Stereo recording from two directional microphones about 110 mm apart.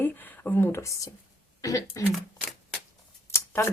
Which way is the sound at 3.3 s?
20° left (ahead or behind).